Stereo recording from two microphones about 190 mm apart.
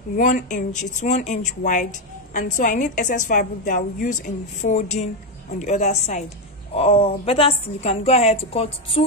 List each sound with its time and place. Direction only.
0.1 s speech: 45° left (ahead or behind)